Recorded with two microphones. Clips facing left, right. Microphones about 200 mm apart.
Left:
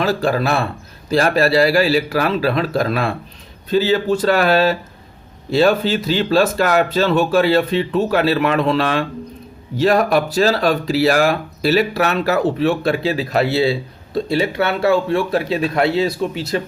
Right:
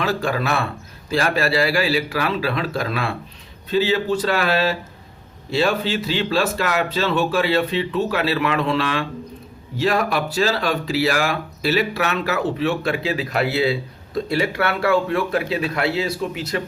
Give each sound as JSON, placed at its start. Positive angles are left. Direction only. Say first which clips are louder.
{"t": 0.0, "sound": "speech", "louder": "left 4 dB", "side_deg": 35}